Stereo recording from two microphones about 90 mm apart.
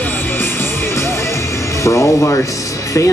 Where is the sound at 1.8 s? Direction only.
35° left (ahead or behind).